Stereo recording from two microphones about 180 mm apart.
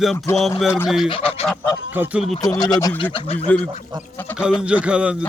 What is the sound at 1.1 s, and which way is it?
Goose, 30° left (ahead or behind).